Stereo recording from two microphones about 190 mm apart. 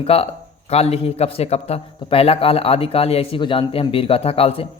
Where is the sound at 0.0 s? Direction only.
30° left (ahead or behind).